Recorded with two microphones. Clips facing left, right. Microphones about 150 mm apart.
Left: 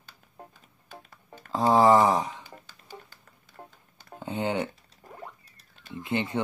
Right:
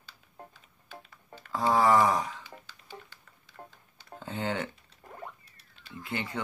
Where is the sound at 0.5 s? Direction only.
45° left (ahead or behind).